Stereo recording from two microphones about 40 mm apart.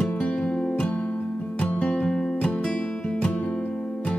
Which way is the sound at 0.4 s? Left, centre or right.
Centre.